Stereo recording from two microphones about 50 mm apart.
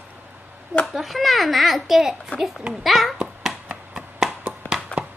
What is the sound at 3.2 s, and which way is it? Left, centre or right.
Cat, centre.